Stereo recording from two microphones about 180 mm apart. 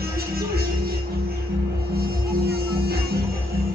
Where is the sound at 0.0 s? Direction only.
55° right (ahead or behind).